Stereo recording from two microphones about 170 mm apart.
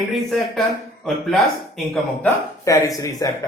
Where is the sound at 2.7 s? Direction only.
20° left (ahead or behind).